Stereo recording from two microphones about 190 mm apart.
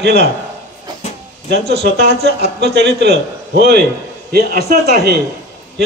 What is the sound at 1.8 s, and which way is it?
A man's voice, 55° right (ahead or behind).